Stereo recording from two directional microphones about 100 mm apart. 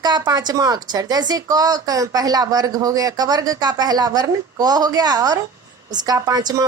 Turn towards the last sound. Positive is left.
turn(degrees=-40)  # may be behind; listen again after turning